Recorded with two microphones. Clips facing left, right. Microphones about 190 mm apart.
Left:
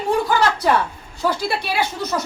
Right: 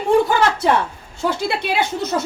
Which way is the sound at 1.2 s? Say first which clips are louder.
Right 1 dB; 25° right (ahead or behind).